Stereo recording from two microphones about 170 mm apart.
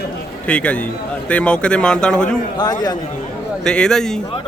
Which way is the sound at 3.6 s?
5° left (ahead or behind).